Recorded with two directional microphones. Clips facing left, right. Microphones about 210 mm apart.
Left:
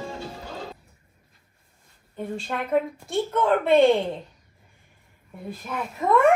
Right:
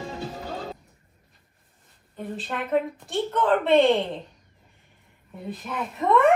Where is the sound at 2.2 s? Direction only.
Centre (ahead or behind).